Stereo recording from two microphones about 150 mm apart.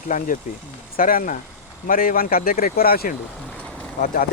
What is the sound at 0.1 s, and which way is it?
Speech, 65° left (ahead or behind).